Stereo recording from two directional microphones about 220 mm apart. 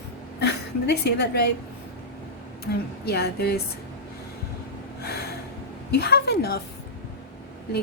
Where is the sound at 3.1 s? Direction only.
45° left (ahead or behind).